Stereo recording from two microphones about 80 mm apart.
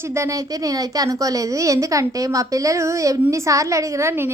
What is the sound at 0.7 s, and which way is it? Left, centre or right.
A woman's voice, right.